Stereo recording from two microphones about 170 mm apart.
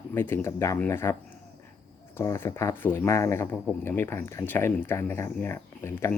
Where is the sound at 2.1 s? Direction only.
15° left (ahead or behind).